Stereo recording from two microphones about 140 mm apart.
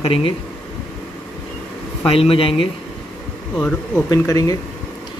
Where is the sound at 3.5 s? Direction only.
5° left (ahead or behind).